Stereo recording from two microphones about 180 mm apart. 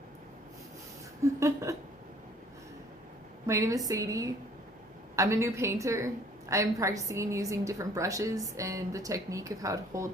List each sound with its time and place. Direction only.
1.4 s a woman's voice: 15° right (ahead or behind)
3.4 s a woman's voice: 15° right (ahead or behind)